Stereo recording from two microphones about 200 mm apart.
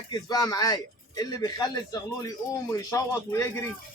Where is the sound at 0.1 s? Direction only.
20° left (ahead or behind).